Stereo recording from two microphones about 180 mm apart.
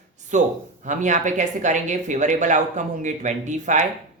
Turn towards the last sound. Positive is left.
turn(degrees=-45)  # may be behind; listen again after turning